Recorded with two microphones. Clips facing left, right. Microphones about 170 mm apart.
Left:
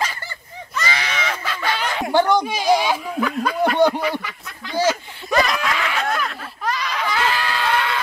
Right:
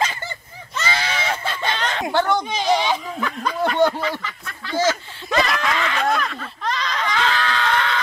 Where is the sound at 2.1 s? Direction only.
10° left (ahead or behind).